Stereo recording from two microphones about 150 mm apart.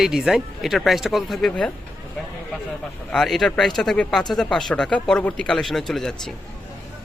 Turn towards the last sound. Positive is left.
turn(degrees=0)  # may be behind; listen again after turning